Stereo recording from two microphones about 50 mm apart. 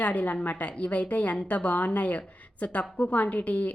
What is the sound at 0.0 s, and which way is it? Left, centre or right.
A woman's voice, left.